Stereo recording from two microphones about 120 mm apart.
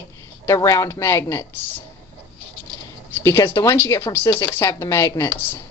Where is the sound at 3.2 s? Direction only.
25° left (ahead or behind).